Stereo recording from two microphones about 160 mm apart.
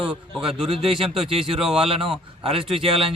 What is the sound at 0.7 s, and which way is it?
Speech, 35° right (ahead or behind).